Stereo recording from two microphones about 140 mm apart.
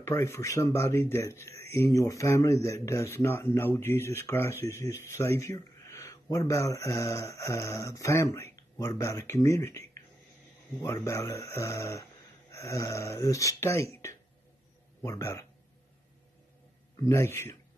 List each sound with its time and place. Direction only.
0.0 s speech: 20° left (ahead or behind)
17.0 s speech: 20° left (ahead or behind)